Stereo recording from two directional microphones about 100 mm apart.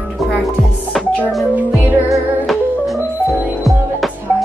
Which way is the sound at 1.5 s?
15° right (ahead or behind).